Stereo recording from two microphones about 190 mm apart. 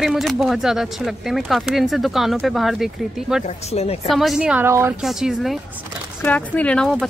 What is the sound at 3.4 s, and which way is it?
Speech, 35° left (ahead or behind).